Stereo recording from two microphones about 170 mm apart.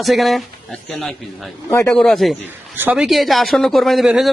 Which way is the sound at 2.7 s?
10° right (ahead or behind).